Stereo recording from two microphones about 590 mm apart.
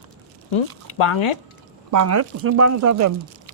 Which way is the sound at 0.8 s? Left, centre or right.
Left.